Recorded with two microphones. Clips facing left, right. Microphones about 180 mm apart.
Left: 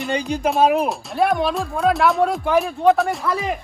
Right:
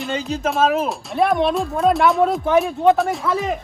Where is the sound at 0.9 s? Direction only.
Centre (ahead or behind).